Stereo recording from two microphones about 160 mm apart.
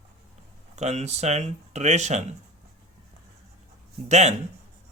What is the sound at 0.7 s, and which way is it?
Speech, 45° right (ahead or behind).